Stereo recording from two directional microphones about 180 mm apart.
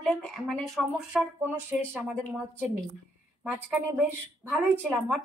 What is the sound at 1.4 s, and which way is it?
Speech, 10° right (ahead or behind).